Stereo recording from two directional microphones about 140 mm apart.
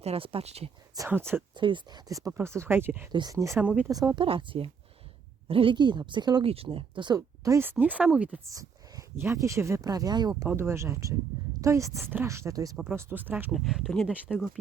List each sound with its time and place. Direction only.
0.0 s speech: 45° right (ahead or behind)
0.9 s a woman's voice: 15° right (ahead or behind)
1.5 s speech: 35° right (ahead or behind); by 3.1 s 15° right (ahead or behind)
3.1 s speech: 30° right (ahead or behind)
3.6 s a woman's voice: 10° right (ahead or behind)
3.8 s a woman's voice: 25° right (ahead or behind)
6.4 s a woman's voice: 40° right (ahead or behind)
7.2 s a woman's voice: 20° right (ahead or behind)
8.4 s speech: 25° right (ahead or behind)
10.5 s a woman's voice: 15° right (ahead or behind)
12.7 s speech: centre (ahead or behind)
13.0 s a woman's voice: 15° right (ahead or behind)
13.5 s speech: centre (ahead or behind)